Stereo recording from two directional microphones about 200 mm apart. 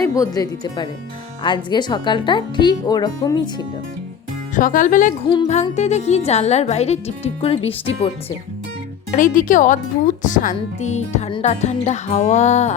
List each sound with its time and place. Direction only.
0.0 s speech: 15° left (ahead or behind)
4.5 s speech: 40° left (ahead or behind)
9.1 s speech: 40° left (ahead or behind)